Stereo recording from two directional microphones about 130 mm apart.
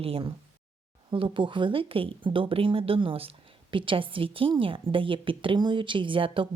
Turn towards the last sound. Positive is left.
turn(degrees=-40)  # may be behind; listen again after turning